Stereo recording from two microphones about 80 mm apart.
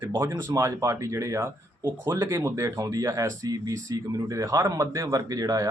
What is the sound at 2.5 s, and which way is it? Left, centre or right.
Speech, right.